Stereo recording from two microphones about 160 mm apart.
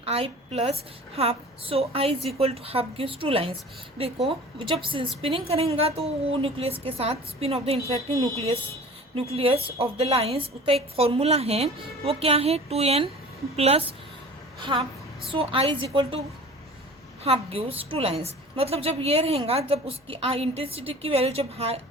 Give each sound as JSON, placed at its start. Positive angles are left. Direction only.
{"t": 0.0, "sound": "a woman's voice", "side_deg": -40}
{"t": 17.2, "sound": "a woman's voice", "side_deg": -35}